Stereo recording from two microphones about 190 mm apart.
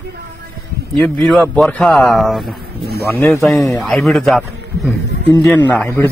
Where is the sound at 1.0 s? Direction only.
Centre (ahead or behind).